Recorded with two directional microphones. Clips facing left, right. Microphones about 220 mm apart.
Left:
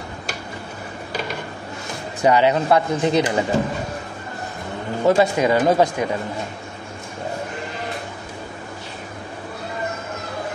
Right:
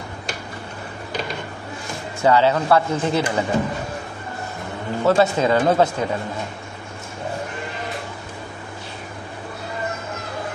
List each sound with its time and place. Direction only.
2.2 s speech: 15° left (ahead or behind)
5.0 s speech: 15° left (ahead or behind)